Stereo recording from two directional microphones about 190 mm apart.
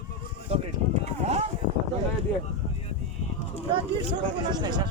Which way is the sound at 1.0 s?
35° right (ahead or behind).